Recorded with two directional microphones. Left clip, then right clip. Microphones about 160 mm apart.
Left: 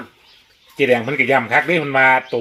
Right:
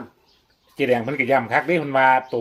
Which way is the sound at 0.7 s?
45° left (ahead or behind).